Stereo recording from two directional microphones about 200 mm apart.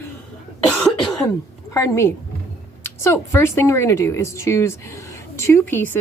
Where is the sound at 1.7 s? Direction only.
15° left (ahead or behind).